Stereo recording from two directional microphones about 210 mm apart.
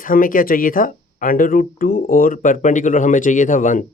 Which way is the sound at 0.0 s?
40° left (ahead or behind).